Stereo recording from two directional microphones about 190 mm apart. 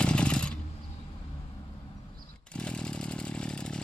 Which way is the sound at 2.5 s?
5° left (ahead or behind).